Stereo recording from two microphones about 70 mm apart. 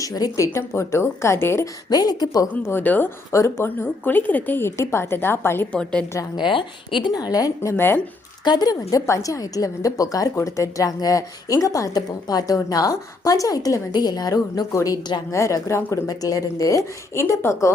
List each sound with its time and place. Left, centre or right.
0.0 s speech: left
1.9 s a woman's voice: left
2.6 s a woman's voice: left
3.3 s speech: left
3.8 s a woman's voice: left
5.7 s a woman's voice: centre
7.0 s a woman's voice: left
7.7 s a woman's voice: left
8.4 s a woman's voice: left
10.3 s a woman's voice: left
14.8 s a woman's voice: left
15.3 s speech: left